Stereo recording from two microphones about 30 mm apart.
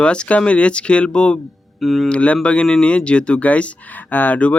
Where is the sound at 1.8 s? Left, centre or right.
Centre.